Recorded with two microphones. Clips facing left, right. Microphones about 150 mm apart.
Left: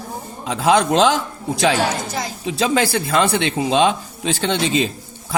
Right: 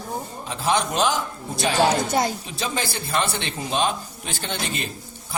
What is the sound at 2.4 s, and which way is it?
Speech, 90° left.